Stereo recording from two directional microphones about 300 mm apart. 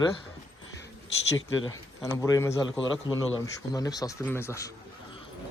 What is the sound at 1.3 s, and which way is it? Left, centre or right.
Speech, left.